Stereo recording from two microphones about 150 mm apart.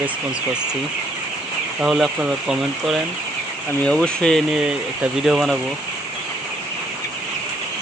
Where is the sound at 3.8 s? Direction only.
5° left (ahead or behind).